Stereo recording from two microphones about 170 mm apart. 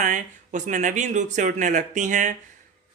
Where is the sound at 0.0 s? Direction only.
50° right (ahead or behind).